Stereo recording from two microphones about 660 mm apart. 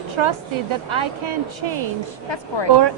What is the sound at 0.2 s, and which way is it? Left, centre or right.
Speech, right.